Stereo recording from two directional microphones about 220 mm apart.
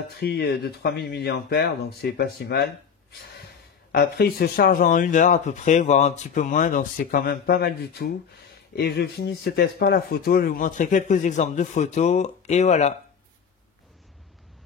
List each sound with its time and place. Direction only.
0.2 s speech: 45° left (ahead or behind); by 12.9 s 30° left (ahead or behind)